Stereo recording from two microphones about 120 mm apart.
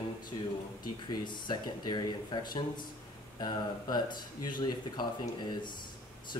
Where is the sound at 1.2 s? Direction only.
40° left (ahead or behind).